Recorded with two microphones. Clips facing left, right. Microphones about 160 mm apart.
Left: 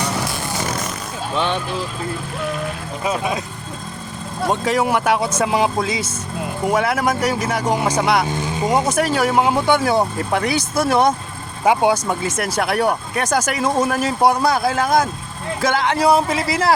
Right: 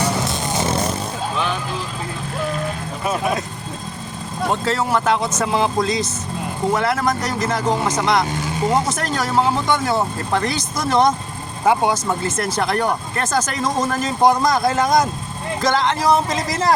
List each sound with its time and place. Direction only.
0.2 s music: 20° right (ahead or behind)
4.6 s speech: 15° left (ahead or behind)